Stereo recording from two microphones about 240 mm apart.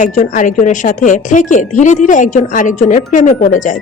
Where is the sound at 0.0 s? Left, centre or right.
Left.